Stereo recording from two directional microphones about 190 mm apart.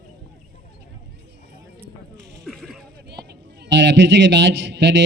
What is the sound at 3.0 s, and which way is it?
A man's voice, 60° right (ahead or behind).